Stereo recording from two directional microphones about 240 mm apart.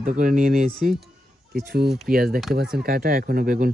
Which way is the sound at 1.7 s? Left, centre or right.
Right.